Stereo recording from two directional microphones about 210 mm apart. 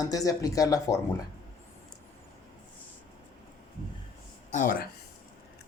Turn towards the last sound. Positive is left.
turn(degrees=40)  # may be behind; listen again after turning